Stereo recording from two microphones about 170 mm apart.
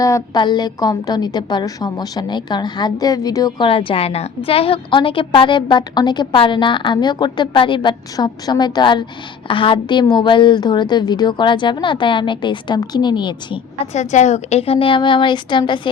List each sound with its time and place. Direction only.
0.0 s a woman's voice: 20° left (ahead or behind)
13.9 s a woman's voice: 45° left (ahead or behind); by 15.9 s 25° left (ahead or behind)